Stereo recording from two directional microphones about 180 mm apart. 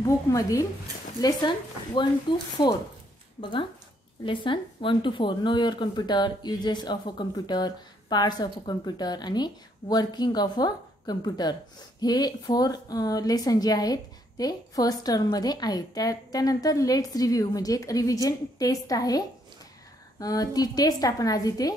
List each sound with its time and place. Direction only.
0.0 s a woman's voice: 20° left (ahead or behind)